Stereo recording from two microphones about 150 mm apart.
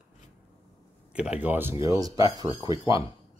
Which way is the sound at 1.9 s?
25° right (ahead or behind).